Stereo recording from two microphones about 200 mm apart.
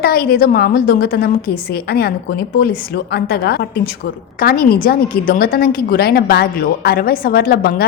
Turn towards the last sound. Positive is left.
turn(degrees=50)  # may be behind; listen again after turning